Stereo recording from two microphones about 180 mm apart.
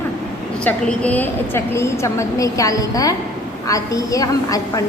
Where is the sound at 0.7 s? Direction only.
10° left (ahead or behind).